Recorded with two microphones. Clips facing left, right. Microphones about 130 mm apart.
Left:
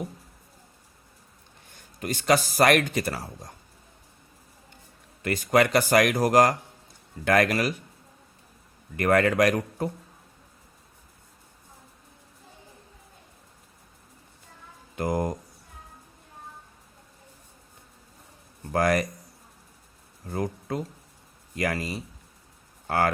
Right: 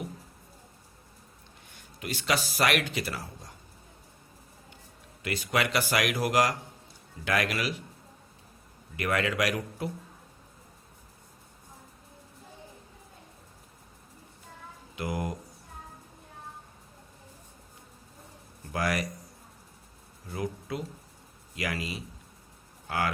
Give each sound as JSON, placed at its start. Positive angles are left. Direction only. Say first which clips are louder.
{"t": 1.7, "sound": "speech", "louder": "left 5 dB", "side_deg": 45}
{"t": 5.2, "sound": "speech", "louder": "left 7 dB", "side_deg": 45}
{"t": 9.0, "sound": "speech", "louder": "left 7 dB", "side_deg": 50}
{"t": 14.9, "sound": "speech", "louder": "left 6 dB", "side_deg": 45}
{"t": 18.7, "sound": "speech", "louder": "left 7 dB", "side_deg": 50}
{"t": 20.2, "sound": "speech", "louder": "left 4 dB", "side_deg": 45}
{"t": 22.9, "sound": "cattle", "louder": "left 6 dB", "side_deg": 50}